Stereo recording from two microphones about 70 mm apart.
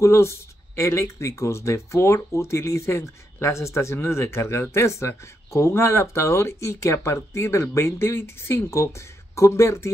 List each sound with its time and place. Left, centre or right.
0.0 s speech: left